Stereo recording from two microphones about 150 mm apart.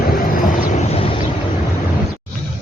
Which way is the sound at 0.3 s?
65° left (ahead or behind).